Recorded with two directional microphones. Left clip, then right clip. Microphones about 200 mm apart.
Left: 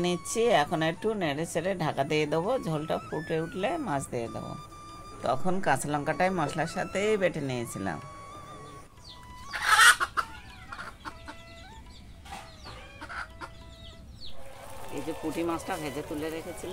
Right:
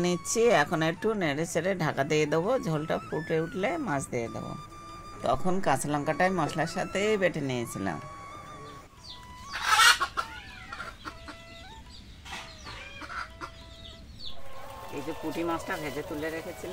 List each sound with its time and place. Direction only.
0.0 s a woman's voice: 5° right (ahead or behind)
9.8 s chicken: 15° left (ahead or behind)
15.2 s a woman's voice: 5° left (ahead or behind)